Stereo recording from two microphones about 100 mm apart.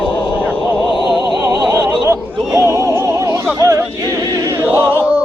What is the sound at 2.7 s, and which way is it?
Music, 35° right (ahead or behind).